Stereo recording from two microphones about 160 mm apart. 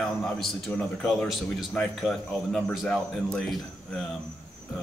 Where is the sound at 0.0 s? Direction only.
Centre (ahead or behind).